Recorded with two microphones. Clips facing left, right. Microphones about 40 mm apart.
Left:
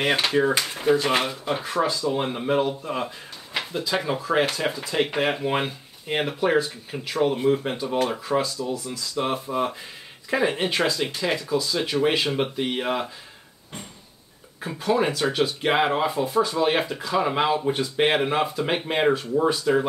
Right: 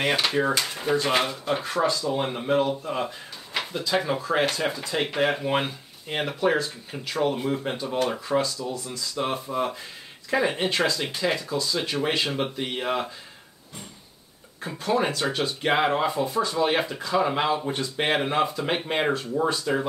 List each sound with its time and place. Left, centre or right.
0.1 s speech: centre
9.2 s speech: centre
14.6 s speech: centre